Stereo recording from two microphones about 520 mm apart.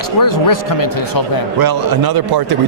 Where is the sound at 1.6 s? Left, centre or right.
Right.